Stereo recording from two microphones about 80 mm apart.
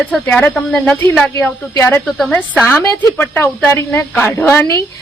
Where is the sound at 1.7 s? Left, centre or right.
Left.